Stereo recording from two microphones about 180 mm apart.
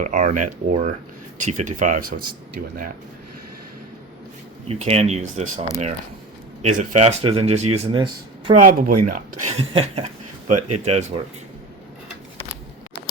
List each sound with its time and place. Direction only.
0.0 s speech: 45° right (ahead or behind)
4.7 s speech: 35° right (ahead or behind)
8.6 s speech: 50° right (ahead or behind)
9.6 s speech: 35° right (ahead or behind)